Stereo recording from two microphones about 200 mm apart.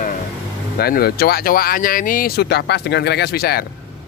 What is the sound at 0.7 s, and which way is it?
Speech, 50° left (ahead or behind).